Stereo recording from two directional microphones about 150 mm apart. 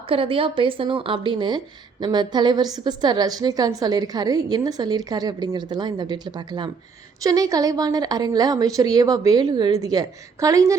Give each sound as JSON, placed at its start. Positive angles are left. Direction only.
{"t": 0.1, "sound": "speech", "side_deg": -35}